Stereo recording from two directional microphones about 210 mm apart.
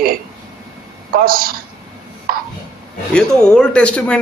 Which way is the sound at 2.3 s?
45° right (ahead or behind).